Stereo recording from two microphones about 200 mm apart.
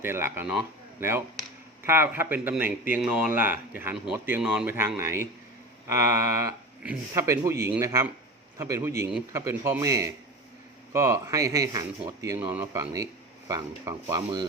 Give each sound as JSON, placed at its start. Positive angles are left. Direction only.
{"t": 0.0, "sound": "speech", "side_deg": -10}